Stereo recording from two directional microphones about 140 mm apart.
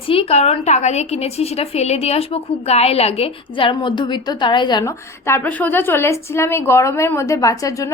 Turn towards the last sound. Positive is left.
turn(degrees=25)  # may be behind; listen again after turning